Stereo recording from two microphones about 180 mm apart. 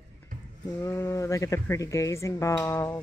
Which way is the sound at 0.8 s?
15° left (ahead or behind).